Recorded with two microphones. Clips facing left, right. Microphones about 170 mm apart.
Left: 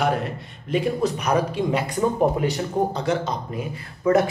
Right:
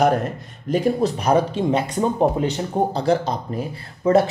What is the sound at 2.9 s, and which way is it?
Speech, 35° right (ahead or behind).